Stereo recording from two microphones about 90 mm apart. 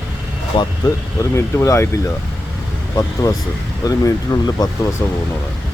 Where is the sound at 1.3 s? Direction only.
30° left (ahead or behind).